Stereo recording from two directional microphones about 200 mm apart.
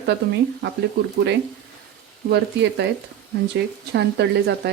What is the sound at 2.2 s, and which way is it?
Speech, 60° right (ahead or behind).